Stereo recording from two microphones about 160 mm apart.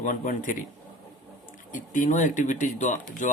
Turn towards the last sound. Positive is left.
turn(degrees=50)  # may be behind; listen again after turning